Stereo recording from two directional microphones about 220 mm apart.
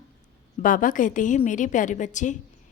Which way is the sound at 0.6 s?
40° left (ahead or behind).